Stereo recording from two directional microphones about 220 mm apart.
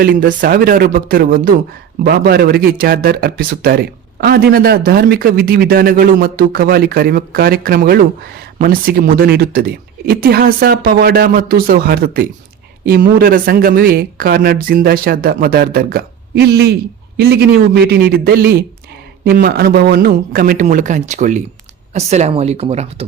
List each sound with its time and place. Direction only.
0.0 s speech: 40° right (ahead or behind)